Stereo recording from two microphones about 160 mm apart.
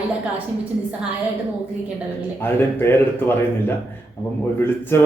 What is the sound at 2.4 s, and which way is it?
Speech, 15° left (ahead or behind).